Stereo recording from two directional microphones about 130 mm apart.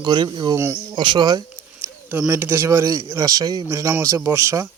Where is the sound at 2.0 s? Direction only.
15° right (ahead or behind).